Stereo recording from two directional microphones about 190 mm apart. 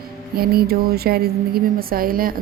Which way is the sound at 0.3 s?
55° right (ahead or behind).